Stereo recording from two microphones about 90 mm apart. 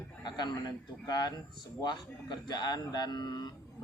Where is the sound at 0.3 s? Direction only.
55° left (ahead or behind).